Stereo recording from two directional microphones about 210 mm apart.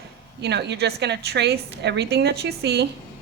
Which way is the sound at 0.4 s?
55° right (ahead or behind).